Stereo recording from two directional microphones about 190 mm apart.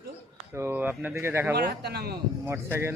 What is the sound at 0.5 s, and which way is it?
Speech, 10° right (ahead or behind).